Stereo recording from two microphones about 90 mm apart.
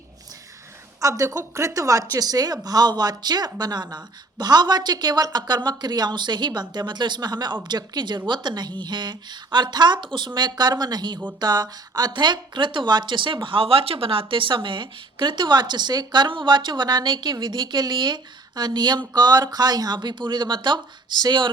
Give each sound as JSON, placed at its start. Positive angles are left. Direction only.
{"t": 1.0, "sound": "a woman's voice", "side_deg": -40}